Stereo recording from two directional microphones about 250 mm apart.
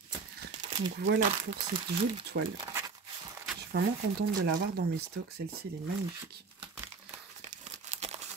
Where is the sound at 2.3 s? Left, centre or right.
Right.